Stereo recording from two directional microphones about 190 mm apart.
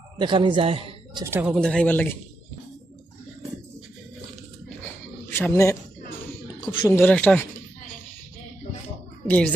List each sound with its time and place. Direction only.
0.2 s a man's voice: 25° right (ahead or behind)
1.2 s speech: 10° right (ahead or behind); by 2.1 s 10° left (ahead or behind)
5.3 s speech: 15° left (ahead or behind)
6.9 s speech: 10° left (ahead or behind)
9.2 s a child's voice: 10° left (ahead or behind)